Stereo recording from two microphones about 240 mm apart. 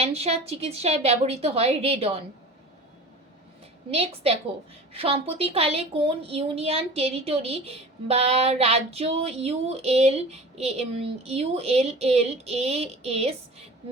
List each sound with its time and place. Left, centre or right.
0.0 s a woman's voice: right
3.9 s a woman's voice: right